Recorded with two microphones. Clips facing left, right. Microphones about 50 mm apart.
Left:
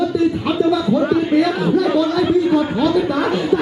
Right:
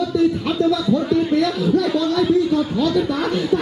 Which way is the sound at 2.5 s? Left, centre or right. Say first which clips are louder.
Left 3 dB; centre.